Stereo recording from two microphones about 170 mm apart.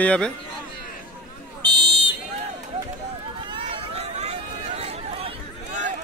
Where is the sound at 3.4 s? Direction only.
30° right (ahead or behind).